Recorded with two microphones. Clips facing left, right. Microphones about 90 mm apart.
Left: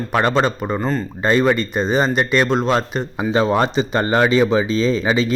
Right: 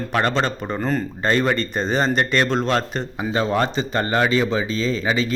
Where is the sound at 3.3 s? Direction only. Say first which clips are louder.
Left 4 dB; 20° left (ahead or behind).